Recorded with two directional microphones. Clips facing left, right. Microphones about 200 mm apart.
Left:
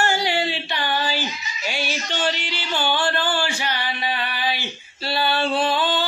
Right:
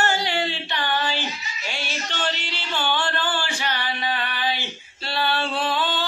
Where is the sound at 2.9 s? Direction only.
10° left (ahead or behind).